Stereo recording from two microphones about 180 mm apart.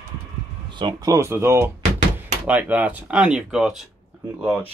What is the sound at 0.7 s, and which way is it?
Speech, 20° right (ahead or behind).